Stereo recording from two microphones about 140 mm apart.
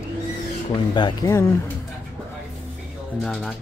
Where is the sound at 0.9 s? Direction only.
25° left (ahead or behind).